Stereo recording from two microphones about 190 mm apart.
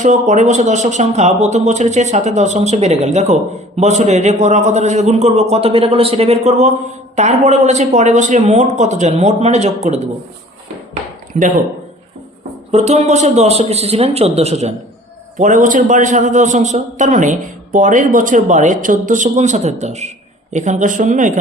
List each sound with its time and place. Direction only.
0.0 s a man's voice: 40° right (ahead or behind)
11.3 s speech: 45° right (ahead or behind)
12.7 s a man's voice: 35° right (ahead or behind)